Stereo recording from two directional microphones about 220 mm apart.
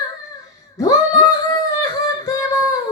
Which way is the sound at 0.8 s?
15° left (ahead or behind).